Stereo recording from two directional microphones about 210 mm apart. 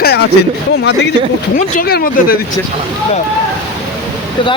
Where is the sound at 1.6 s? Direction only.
45° left (ahead or behind).